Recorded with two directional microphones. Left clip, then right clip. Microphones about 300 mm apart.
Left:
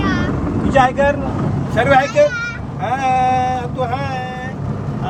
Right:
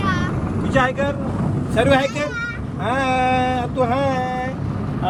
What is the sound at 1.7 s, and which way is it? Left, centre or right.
Speech, centre.